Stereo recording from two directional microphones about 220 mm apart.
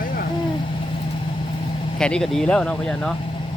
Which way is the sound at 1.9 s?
5° left (ahead or behind).